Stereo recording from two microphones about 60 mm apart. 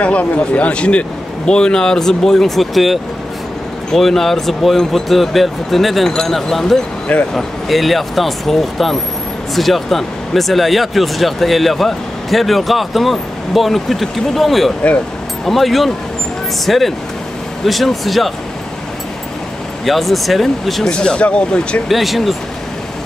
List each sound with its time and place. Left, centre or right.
0.0 s a man's voice: left; by 18.3 s centre
19.8 s speech: centre
20.9 s a man's voice: centre
21.8 s speech: centre